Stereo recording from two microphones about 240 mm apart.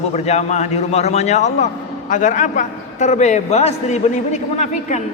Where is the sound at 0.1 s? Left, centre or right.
Left.